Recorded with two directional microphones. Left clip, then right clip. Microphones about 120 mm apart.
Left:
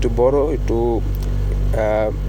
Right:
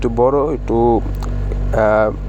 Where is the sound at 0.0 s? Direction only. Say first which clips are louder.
Right 2 dB; 35° right (ahead or behind).